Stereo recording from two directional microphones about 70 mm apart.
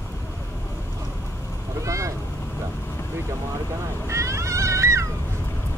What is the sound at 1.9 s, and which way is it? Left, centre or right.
Boat, right.